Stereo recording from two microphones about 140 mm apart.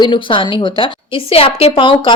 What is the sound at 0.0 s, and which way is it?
A woman's voice, 35° left (ahead or behind).